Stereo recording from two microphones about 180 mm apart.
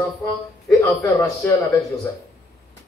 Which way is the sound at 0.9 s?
20° left (ahead or behind).